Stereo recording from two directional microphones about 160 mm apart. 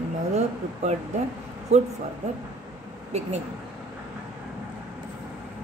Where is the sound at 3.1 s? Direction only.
45° right (ahead or behind).